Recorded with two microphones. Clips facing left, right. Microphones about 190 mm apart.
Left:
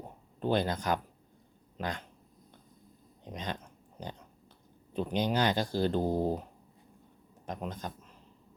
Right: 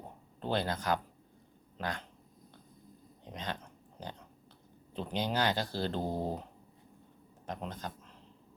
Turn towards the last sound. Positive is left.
turn(degrees=15)  # may be behind; listen again after turning